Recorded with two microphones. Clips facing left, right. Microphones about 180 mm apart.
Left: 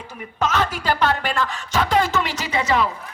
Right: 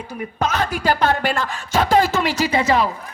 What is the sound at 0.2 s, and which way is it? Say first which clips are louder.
A woman's voice: even; 45° right (ahead or behind).